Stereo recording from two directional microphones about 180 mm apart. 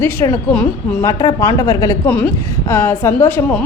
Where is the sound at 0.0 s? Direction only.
15° left (ahead or behind).